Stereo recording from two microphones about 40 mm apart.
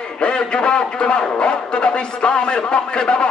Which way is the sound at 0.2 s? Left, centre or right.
Left.